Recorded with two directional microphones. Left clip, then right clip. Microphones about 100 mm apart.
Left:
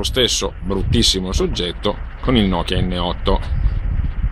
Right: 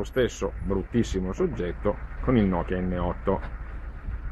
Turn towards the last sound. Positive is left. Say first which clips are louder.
# left 7 dB
turn(degrees=25)  # may be behind; listen again after turning